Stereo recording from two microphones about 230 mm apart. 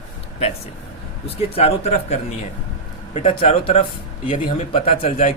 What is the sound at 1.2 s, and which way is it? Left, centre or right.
Speech, left.